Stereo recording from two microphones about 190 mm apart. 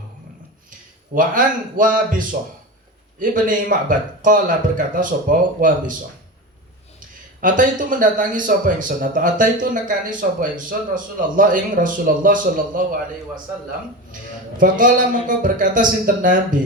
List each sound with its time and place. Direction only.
1.1 s a man's voice: 45° right (ahead or behind)
7.4 s a man's voice: 45° right (ahead or behind)
14.6 s a man's voice: 45° right (ahead or behind)